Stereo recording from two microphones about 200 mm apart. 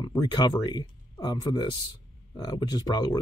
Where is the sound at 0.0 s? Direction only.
20° left (ahead or behind).